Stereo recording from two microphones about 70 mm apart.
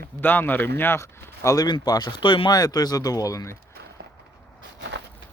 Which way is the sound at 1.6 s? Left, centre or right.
Left.